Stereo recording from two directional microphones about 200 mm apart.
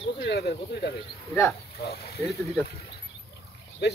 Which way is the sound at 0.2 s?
55° left (ahead or behind).